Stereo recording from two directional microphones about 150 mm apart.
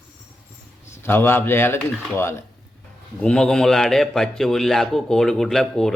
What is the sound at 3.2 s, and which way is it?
A man's voice, 5° left (ahead or behind).